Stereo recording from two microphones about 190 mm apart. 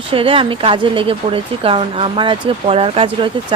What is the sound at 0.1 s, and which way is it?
A woman's voice, 30° right (ahead or behind).